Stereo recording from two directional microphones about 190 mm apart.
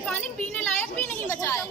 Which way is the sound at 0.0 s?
5° left (ahead or behind).